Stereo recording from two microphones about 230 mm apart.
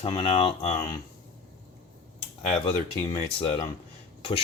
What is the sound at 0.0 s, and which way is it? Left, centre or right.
Speech, left.